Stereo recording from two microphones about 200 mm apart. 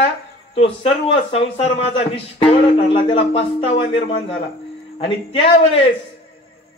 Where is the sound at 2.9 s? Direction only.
25° left (ahead or behind).